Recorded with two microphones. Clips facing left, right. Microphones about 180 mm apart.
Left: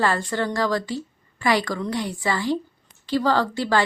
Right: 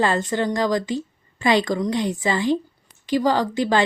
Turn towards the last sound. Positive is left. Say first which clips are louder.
# right 1 dB
turn(degrees=-15)  # may be behind; listen again after turning